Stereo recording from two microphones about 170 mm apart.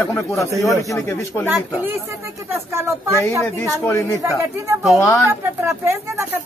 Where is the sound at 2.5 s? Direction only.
15° right (ahead or behind).